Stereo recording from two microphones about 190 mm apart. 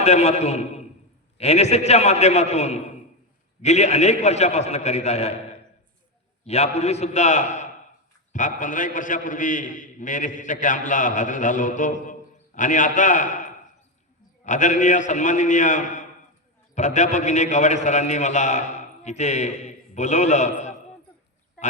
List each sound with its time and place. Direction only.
0.0 s a man's voice: 35° left (ahead or behind)